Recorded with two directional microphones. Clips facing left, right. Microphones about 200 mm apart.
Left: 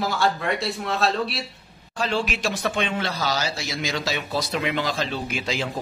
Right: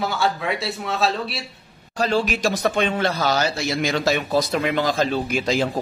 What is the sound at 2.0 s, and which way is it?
Speech, 40° right (ahead or behind).